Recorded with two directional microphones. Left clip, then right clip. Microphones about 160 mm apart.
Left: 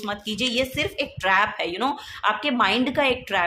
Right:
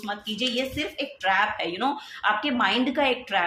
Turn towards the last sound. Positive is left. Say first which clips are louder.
# left 2 dB
turn(degrees=30)  # may be behind; listen again after turning